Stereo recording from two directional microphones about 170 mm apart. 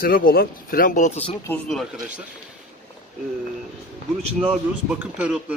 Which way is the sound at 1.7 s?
Centre (ahead or behind).